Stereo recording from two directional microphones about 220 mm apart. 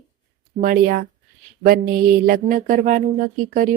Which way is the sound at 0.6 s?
40° right (ahead or behind).